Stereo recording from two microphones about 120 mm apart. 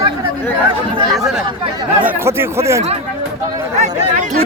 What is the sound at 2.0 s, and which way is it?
Speech, 15° right (ahead or behind).